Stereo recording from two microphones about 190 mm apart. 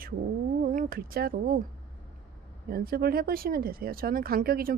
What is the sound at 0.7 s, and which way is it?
Speech, 50° right (ahead or behind).